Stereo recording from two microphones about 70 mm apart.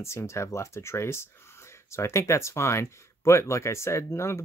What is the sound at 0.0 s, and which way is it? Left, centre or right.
Speech, left.